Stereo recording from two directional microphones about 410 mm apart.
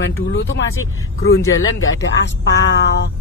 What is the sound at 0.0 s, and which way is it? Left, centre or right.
Speech, left.